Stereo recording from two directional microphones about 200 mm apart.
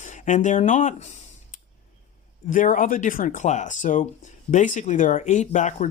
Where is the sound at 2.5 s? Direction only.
40° left (ahead or behind).